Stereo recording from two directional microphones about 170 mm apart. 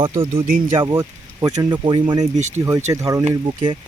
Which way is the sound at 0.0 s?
35° right (ahead or behind).